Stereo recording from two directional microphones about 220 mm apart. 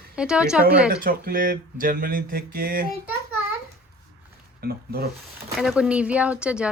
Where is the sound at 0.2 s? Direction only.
5° right (ahead or behind).